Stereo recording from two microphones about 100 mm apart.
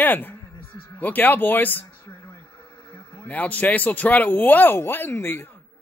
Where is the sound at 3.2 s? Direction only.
15° left (ahead or behind).